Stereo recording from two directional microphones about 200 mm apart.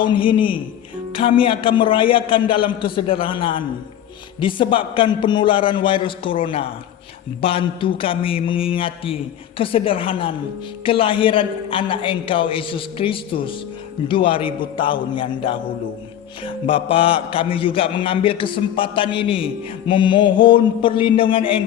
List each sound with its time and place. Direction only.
0.0 s a man's voice: 25° left (ahead or behind)